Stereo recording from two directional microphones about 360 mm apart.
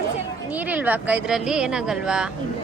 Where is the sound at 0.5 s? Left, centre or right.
Centre.